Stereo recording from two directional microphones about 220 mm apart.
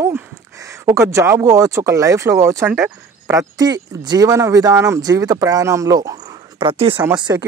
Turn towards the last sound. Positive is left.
turn(degrees=-15)  # may be behind; listen again after turning